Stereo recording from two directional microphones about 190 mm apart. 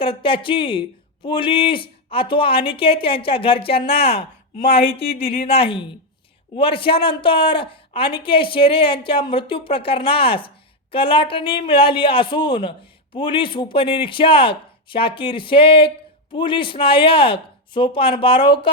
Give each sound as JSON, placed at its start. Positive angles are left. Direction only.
{"t": 0.0, "sound": "a man's voice", "side_deg": 30}